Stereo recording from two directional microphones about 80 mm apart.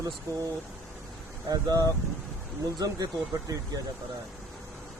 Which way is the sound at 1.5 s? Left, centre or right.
Right.